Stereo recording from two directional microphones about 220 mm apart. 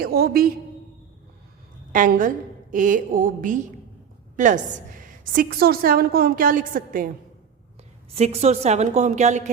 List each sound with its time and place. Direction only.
0.0 s a woman's voice: 45° right (ahead or behind)
1.9 s a woman's voice: 35° right (ahead or behind)
8.1 s a woman's voice: 30° right (ahead or behind)